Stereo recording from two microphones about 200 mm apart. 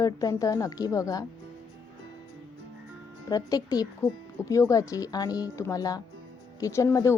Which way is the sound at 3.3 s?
20° left (ahead or behind).